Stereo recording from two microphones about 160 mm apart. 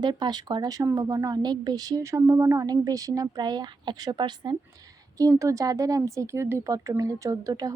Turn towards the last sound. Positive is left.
turn(degrees=-20)  # may be behind; listen again after turning